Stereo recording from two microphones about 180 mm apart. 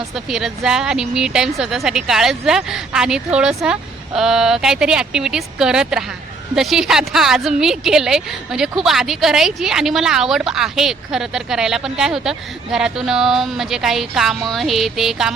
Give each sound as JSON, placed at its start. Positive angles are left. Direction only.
{"t": 0.3, "sound": "a woman's voice", "side_deg": 0}